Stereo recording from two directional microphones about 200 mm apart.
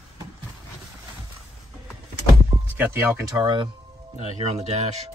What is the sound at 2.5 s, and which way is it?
Speech, 10° right (ahead or behind).